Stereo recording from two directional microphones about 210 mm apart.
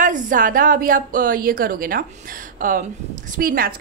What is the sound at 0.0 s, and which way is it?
A woman's voice, 40° right (ahead or behind).